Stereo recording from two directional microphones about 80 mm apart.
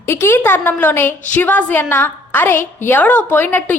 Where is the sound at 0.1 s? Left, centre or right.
Left.